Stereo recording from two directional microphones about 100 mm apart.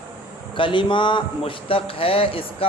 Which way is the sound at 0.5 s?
55° left (ahead or behind).